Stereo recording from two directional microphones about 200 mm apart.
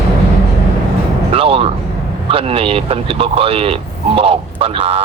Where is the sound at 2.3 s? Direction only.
30° right (ahead or behind).